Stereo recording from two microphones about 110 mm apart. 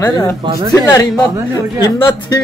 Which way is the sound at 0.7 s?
35° left (ahead or behind).